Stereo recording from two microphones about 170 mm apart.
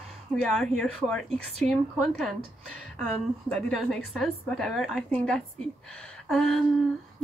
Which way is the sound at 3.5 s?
Centre (ahead or behind).